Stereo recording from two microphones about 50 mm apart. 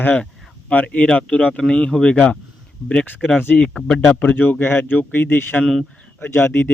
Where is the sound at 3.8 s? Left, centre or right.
Left.